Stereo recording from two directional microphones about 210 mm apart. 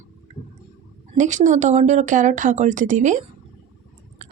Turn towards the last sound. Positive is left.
turn(degrees=-35)  # may be behind; listen again after turning